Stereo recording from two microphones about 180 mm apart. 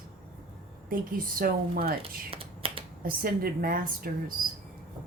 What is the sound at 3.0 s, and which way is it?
A woman's voice, 55° right (ahead or behind).